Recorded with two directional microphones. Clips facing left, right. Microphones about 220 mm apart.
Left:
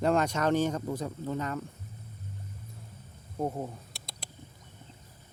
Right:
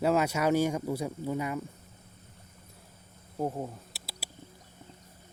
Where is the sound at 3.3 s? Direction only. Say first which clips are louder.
Even; centre (ahead or behind).